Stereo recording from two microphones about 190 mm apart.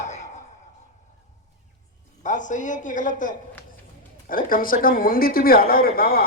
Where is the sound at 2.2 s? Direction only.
40° left (ahead or behind).